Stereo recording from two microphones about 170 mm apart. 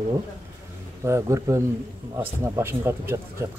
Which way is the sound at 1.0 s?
15° right (ahead or behind).